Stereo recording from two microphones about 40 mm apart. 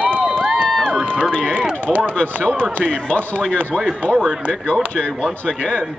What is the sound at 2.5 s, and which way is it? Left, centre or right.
Speech, right.